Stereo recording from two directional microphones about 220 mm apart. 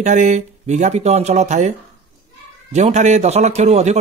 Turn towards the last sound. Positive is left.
turn(degrees=-30)  # may be behind; listen again after turning